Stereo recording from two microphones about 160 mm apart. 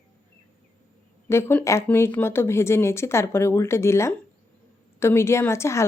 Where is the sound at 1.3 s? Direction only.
15° left (ahead or behind).